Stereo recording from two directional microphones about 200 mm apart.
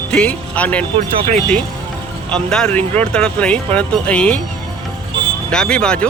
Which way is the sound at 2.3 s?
5° left (ahead or behind).